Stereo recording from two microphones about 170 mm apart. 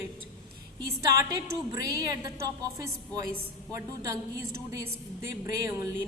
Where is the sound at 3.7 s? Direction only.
20° right (ahead or behind).